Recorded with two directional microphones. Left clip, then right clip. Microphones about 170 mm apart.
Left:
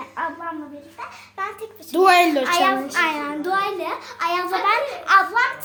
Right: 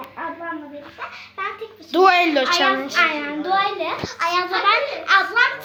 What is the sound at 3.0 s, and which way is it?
Speech, 90° left.